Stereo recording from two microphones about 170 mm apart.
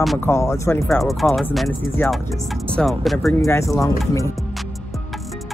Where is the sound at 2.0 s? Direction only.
10° left (ahead or behind).